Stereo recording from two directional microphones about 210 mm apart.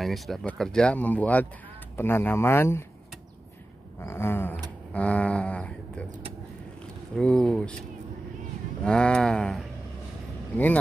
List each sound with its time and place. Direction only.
0.0 s speech: centre (ahead or behind)
4.0 s speech: 10° left (ahead or behind)
7.2 s speech: 5° left (ahead or behind)
8.8 s speech: 5° left (ahead or behind)